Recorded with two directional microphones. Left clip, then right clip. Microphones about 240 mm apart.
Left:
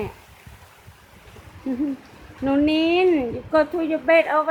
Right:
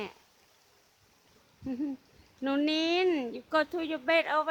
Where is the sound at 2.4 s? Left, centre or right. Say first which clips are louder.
Left 9 dB; right.